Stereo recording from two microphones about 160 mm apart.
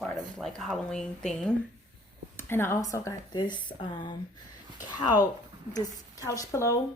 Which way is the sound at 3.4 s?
30° left (ahead or behind).